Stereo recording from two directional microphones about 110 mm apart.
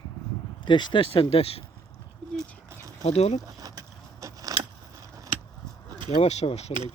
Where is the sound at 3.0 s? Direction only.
80° left.